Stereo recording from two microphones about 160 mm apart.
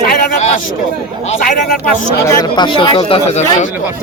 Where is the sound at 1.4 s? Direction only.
60° left (ahead or behind).